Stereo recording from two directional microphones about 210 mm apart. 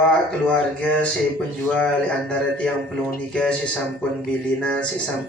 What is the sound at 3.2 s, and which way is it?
Speech, 5° left (ahead or behind).